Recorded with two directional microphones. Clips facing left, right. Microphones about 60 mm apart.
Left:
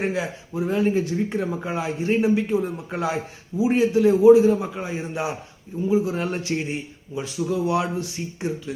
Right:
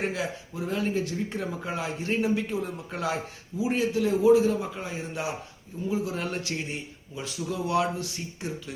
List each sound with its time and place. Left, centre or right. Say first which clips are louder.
0.0 s a man's voice: left 4 dB; centre